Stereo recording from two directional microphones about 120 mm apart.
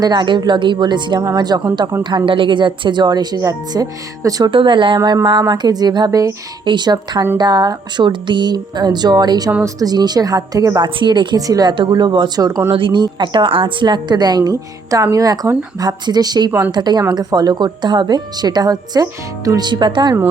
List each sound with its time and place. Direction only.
0.0 s a woman's voice: 40° right (ahead or behind)
2.0 s a woman's voice: 45° right (ahead or behind)
4.5 s a woman's voice: 45° right (ahead or behind)
12.7 s a woman's voice: 40° right (ahead or behind)
16.5 s speech: 20° right (ahead or behind)
16.7 s a woman's voice: 35° right (ahead or behind)